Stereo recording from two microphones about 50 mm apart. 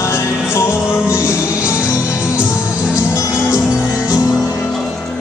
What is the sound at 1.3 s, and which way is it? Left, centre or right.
Music, left.